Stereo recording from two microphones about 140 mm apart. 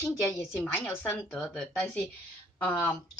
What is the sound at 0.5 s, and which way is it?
Speech, 15° left (ahead or behind).